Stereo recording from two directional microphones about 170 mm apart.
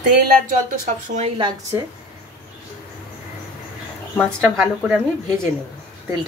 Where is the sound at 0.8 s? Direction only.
45° right (ahead or behind).